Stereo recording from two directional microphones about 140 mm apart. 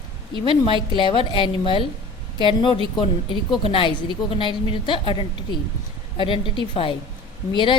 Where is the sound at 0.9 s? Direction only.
35° left (ahead or behind).